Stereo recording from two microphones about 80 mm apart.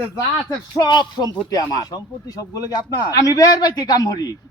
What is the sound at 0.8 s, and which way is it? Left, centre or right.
Speech, left.